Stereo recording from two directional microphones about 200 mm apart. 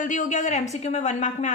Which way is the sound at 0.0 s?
40° left (ahead or behind).